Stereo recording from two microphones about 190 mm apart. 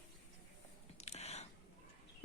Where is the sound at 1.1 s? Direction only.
35° left (ahead or behind).